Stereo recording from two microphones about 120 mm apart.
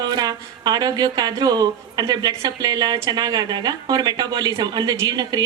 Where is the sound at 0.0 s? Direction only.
35° right (ahead or behind).